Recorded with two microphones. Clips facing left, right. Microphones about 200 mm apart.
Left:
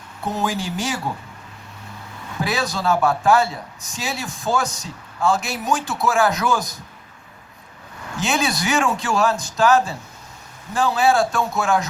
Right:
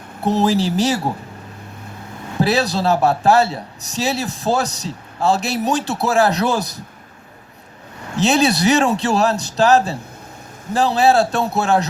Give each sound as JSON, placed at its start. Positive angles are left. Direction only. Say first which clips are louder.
{"t": 0.3, "sound": "a man's voice", "louder": "right 8 dB", "side_deg": -35}
{"t": 2.4, "sound": "a man's voice", "louder": "right 6 dB", "side_deg": -35}
{"t": 8.1, "sound": "a man's voice", "louder": "right 7 dB", "side_deg": -35}